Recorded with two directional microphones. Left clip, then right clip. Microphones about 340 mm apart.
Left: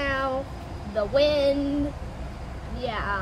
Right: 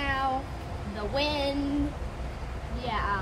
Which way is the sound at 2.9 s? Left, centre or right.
Centre.